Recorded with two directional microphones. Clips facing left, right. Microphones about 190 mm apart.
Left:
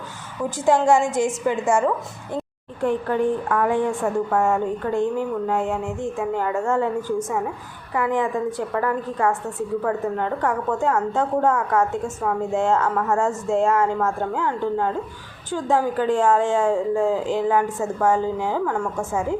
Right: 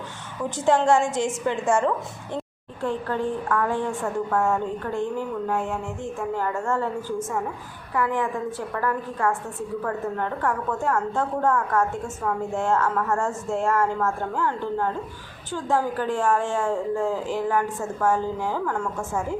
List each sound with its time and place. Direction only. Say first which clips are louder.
0.5 s a woman's voice: left 2 dB; 10° left (ahead or behind)
12.5 s a woman's voice: left 3 dB; 15° left (ahead or behind)